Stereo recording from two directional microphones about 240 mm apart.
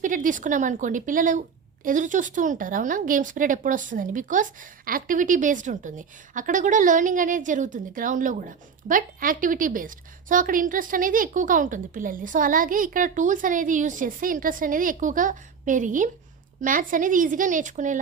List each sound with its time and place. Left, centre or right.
0.0 s speech: right